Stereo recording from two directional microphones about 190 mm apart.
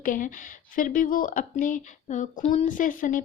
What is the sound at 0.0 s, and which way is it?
Speech, 45° left (ahead or behind).